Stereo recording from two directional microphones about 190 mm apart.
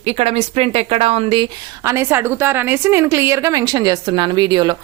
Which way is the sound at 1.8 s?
15° right (ahead or behind).